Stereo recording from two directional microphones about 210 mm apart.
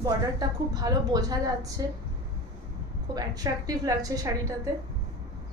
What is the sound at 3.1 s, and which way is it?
A woman's voice, 20° right (ahead or behind).